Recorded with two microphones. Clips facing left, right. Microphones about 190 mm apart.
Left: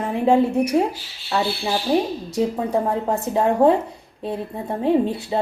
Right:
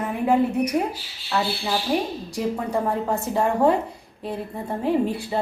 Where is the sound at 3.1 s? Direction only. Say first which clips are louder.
Left 4 dB; 20° left (ahead or behind).